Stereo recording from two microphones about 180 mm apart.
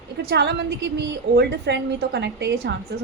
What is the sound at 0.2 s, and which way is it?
A woman's voice, 65° right (ahead or behind).